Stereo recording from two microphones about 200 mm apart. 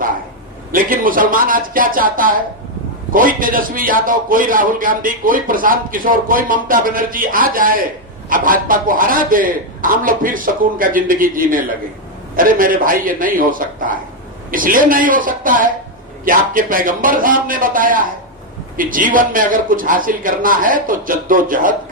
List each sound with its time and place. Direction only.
0.7 s a man's voice: 45° right (ahead or behind)